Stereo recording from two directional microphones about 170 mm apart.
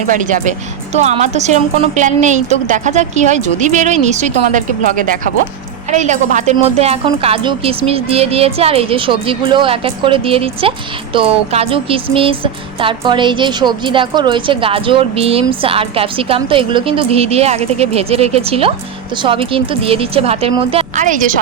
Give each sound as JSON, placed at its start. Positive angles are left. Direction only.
{"t": 0.1, "sound": "a woman's voice", "side_deg": -50}